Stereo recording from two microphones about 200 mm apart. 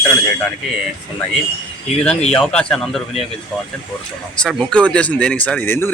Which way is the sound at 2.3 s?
5° left (ahead or behind).